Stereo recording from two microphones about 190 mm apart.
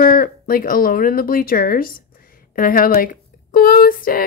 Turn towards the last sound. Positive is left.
turn(degrees=50)  # may be behind; listen again after turning